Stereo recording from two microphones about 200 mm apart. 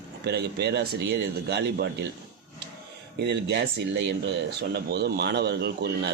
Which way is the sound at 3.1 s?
55° right (ahead or behind).